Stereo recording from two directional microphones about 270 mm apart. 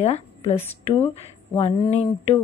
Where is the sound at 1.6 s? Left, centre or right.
Left.